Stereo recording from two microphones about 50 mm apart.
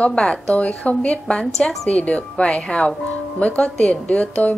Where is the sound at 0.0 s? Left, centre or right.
Left.